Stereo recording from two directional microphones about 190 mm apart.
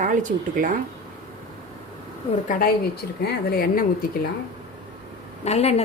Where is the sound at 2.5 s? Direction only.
50° left (ahead or behind).